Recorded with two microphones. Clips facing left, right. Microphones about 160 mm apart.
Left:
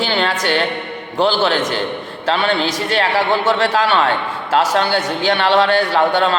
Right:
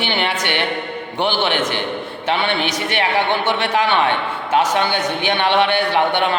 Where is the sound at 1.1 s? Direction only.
90° left.